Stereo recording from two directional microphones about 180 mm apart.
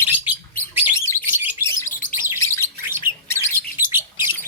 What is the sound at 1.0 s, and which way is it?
Bird, 15° left (ahead or behind).